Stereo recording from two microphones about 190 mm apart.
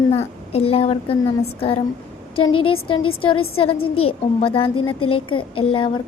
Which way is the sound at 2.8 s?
25° left (ahead or behind).